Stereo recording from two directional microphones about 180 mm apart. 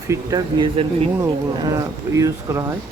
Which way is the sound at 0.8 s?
30° right (ahead or behind).